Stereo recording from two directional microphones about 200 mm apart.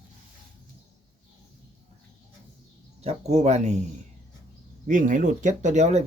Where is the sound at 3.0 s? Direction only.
35° right (ahead or behind).